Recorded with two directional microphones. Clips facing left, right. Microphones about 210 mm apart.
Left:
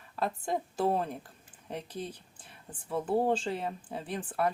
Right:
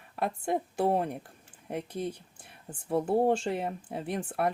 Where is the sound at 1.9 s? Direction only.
25° right (ahead or behind).